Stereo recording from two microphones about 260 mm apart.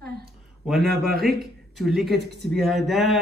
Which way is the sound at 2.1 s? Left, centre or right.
Right.